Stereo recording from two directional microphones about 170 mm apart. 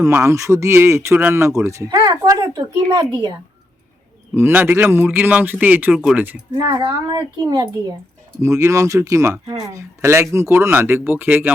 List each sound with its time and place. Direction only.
0.3 s speech: 15° right (ahead or behind)
4.4 s speech: 15° right (ahead or behind)
6.5 s speech: 20° right (ahead or behind)